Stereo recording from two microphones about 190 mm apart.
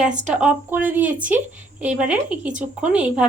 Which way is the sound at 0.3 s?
5° right (ahead or behind).